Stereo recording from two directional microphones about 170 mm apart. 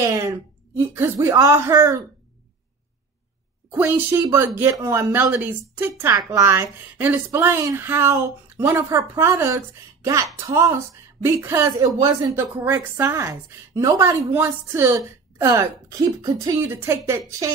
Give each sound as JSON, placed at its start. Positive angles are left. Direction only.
{"t": 0.0, "sound": "speech", "side_deg": -20}
{"t": 3.7, "sound": "speech", "side_deg": -10}